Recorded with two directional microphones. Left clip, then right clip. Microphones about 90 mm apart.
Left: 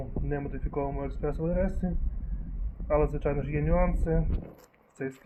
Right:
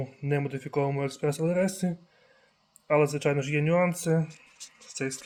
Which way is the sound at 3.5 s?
60° right (ahead or behind).